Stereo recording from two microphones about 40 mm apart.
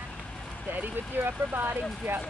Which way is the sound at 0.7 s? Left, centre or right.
Right.